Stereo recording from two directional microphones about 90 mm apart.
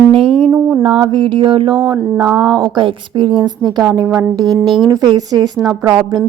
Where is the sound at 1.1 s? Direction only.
65° right (ahead or behind); by 2.8 s 50° right (ahead or behind).